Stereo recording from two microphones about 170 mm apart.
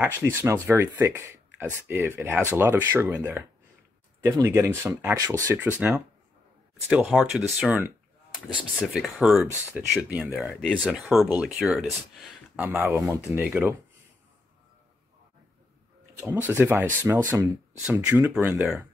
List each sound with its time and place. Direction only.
0.0 s speech: 15° right (ahead or behind)
7.1 s speech: 5° left (ahead or behind)
8.5 s speech: centre (ahead or behind)
9.5 s speech: 15° right (ahead or behind)
16.2 s speech: 15° right (ahead or behind)